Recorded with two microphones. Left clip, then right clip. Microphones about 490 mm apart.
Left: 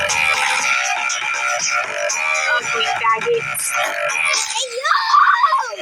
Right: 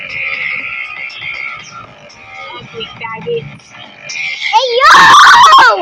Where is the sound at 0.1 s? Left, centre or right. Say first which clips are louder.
Left 1 dB; left.